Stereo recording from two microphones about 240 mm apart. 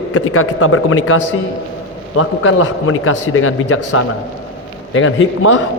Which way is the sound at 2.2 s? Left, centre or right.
Left.